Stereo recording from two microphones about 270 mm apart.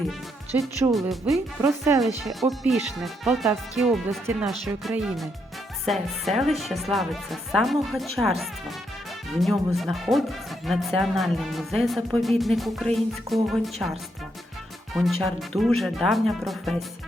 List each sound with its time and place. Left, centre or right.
0.6 s speech: centre
14.9 s speech: centre